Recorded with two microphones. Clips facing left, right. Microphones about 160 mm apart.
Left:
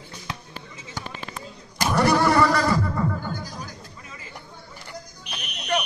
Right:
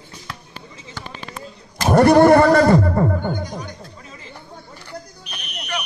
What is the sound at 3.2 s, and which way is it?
Music, 65° right (ahead or behind).